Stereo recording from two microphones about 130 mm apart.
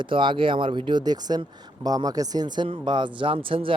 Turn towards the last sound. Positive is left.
turn(degrees=-45)  # may be behind; listen again after turning